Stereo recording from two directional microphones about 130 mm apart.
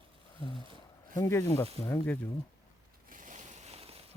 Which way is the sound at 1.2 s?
20° left (ahead or behind).